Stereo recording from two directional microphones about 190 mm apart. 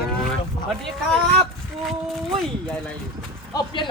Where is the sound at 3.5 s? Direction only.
25° left (ahead or behind).